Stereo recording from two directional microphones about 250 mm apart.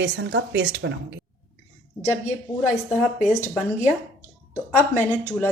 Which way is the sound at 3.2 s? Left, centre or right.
Left.